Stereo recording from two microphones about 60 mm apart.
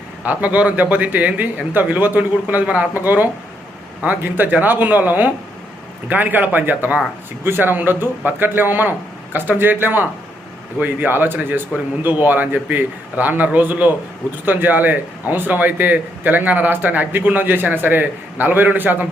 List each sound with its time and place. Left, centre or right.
0.3 s speech: right